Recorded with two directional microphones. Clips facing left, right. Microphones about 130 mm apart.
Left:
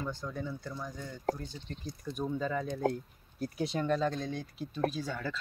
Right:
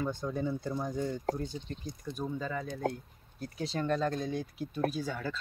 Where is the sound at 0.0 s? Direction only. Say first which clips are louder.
Right 5 dB; 20° right (ahead or behind).